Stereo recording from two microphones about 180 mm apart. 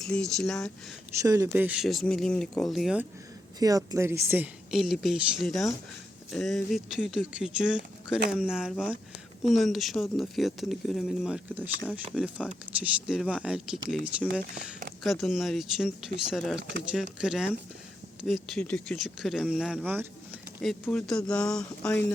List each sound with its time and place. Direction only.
0.0 s speech: 5° left (ahead or behind)
1.2 s speech: 20° right (ahead or behind)
3.6 s speech: 20° right (ahead or behind)
14.5 s speech: 45° right (ahead or behind)
15.0 s speech: centre (ahead or behind)
20.8 s speech: 5° left (ahead or behind)